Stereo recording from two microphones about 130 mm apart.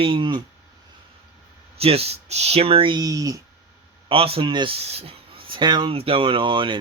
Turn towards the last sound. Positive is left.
turn(degrees=-40)  # may be behind; listen again after turning